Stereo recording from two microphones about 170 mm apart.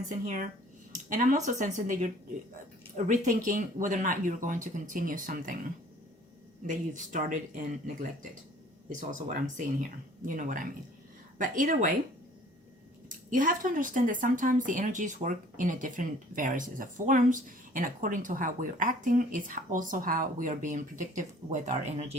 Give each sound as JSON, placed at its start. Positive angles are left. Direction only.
{"t": 0.1, "sound": "speech", "side_deg": -50}
{"t": 6.7, "sound": "speech", "side_deg": -50}
{"t": 13.3, "sound": "speech", "side_deg": -50}